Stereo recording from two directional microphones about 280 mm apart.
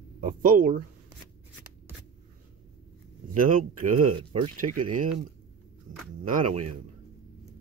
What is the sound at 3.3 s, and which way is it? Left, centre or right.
Speech, right.